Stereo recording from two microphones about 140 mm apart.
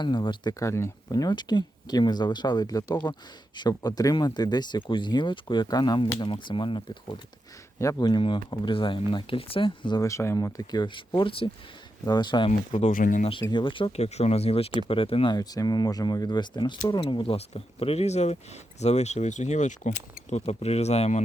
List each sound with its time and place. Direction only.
0.0 s speech: 35° left (ahead or behind)
0.6 s speech: 20° left (ahead or behind)
12.5 s speech: 55° left (ahead or behind)
12.9 s speech: 70° left (ahead or behind)
13.5 s speech: 35° left (ahead or behind)
15.4 s speech: 25° left (ahead or behind); by 21.2 s 50° left (ahead or behind)